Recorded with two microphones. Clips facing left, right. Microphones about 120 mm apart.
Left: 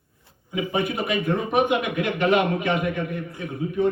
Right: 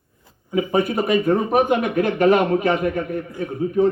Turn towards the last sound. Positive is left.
turn(degrees=-40)  # may be behind; listen again after turning